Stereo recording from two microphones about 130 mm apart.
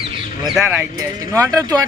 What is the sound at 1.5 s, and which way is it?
Speech, 30° right (ahead or behind).